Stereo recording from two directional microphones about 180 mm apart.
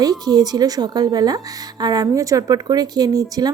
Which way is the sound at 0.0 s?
20° right (ahead or behind).